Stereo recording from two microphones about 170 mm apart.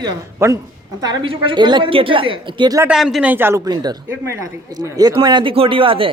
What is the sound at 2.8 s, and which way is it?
Speech, 5° right (ahead or behind).